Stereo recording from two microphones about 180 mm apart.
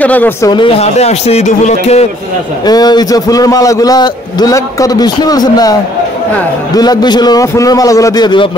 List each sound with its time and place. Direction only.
0.0 s speech: 10° left (ahead or behind)
0.5 s a man's voice: 30° left (ahead or behind)
2.6 s a man's voice: 20° left (ahead or behind)